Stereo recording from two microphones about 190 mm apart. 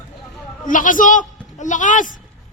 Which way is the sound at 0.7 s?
45° left (ahead or behind).